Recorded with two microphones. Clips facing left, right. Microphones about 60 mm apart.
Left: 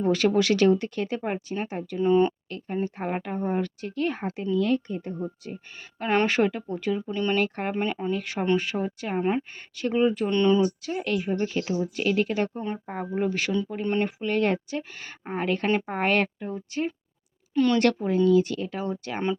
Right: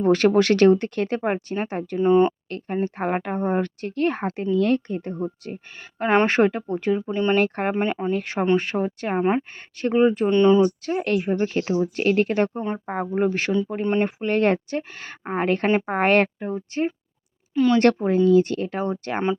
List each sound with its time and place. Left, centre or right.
0.0 s speech: right
2.0 s speech: right
2.5 s speech: right
6.0 s speech: right
7.1 s speech: right
7.4 s speech: right
7.7 s speech: right
10.2 s speech: right
10.8 s speech: right
17.5 s speech: centre
17.7 s speech: right